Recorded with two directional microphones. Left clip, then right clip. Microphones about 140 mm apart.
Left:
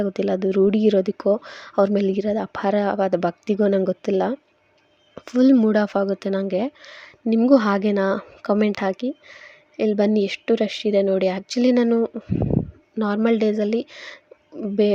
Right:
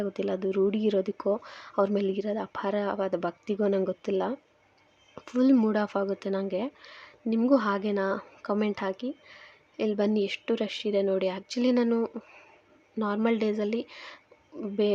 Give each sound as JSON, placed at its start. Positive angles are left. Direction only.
{"t": 0.0, "sound": "a woman's voice", "side_deg": 35}